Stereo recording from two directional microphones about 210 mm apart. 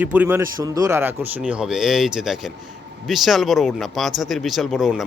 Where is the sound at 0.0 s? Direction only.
10° right (ahead or behind).